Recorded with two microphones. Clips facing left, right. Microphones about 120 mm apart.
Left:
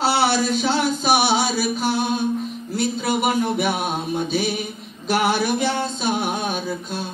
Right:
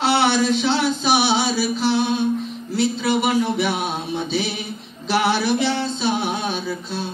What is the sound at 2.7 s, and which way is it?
Mantra, 45° left (ahead or behind).